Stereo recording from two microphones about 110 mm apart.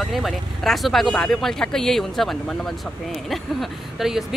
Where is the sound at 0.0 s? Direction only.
Centre (ahead or behind).